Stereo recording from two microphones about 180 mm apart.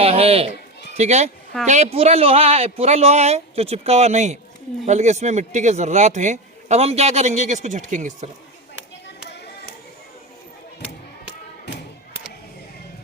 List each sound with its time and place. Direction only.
0.0 s a man's voice: 35° right (ahead or behind)